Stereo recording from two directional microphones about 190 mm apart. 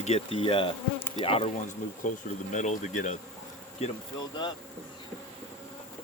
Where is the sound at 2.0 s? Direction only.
45° left (ahead or behind).